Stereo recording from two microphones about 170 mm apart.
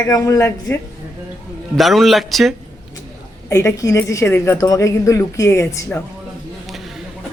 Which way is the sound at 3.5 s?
20° left (ahead or behind).